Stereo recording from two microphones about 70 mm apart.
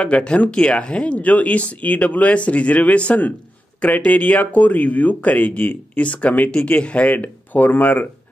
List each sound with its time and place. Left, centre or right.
0.0 s speech: centre